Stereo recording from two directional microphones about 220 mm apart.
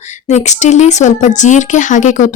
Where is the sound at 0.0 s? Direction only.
30° left (ahead or behind).